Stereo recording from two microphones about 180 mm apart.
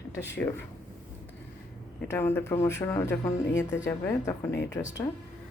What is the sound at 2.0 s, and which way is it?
A woman's voice, 10° left (ahead or behind).